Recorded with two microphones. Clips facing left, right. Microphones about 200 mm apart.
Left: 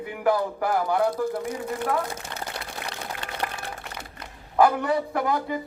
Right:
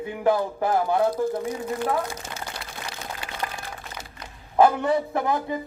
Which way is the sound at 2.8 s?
60° left (ahead or behind).